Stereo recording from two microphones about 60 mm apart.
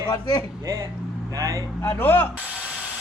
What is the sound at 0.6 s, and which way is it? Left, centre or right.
Speech, right.